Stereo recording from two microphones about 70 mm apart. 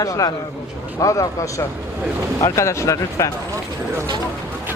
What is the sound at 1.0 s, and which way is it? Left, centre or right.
Speech, left.